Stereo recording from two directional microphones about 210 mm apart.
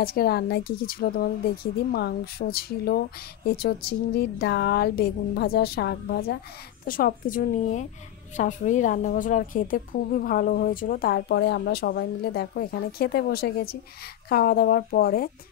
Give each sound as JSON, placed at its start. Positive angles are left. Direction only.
{"t": 0.0, "sound": "a woman's voice", "side_deg": 45}